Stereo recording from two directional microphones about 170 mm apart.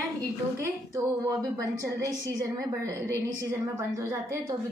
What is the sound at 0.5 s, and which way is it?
A woman's voice, 20° right (ahead or behind).